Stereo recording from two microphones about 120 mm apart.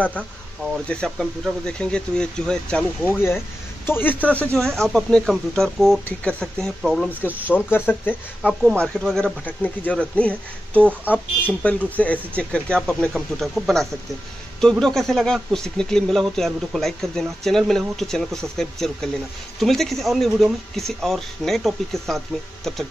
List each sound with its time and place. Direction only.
0.8 s speech: 5° left (ahead or behind)
3.8 s speech: 15° left (ahead or behind); by 7.1 s centre (ahead or behind)
7.2 s speech: 15° right (ahead or behind)
7.5 s speech: 15° left (ahead or behind)
10.9 s speech: 15° right (ahead or behind)
11.6 s speech: 10° left (ahead or behind)